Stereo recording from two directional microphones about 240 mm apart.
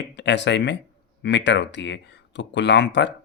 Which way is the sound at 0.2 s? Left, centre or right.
Left.